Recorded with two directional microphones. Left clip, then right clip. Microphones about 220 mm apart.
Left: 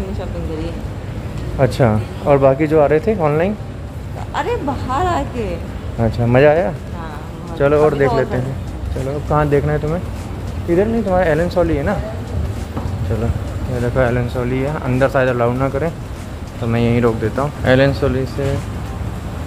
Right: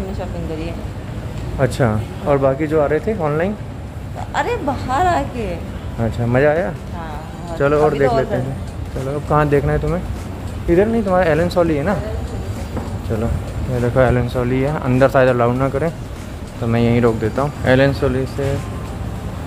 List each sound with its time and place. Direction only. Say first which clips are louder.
1.6 s speech: left 3 dB; 10° left (ahead or behind)
4.3 s speech: even; 10° right (ahead or behind)
5.9 s speech: left 4 dB; 10° left (ahead or behind)
7.5 s speech: left 2 dB; centre (ahead or behind)
13.7 s speech: right 2 dB; 15° right (ahead or behind)